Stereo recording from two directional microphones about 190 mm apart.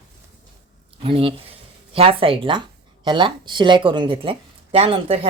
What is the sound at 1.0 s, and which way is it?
Speech, 30° right (ahead or behind).